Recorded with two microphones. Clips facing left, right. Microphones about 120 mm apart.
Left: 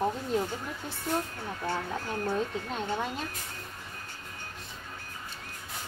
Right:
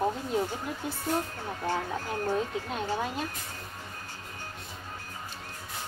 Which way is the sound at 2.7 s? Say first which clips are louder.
Right 1 dB; 5° right (ahead or behind).